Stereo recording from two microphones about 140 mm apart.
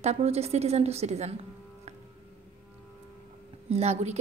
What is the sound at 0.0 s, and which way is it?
A woman's voice, 50° right (ahead or behind).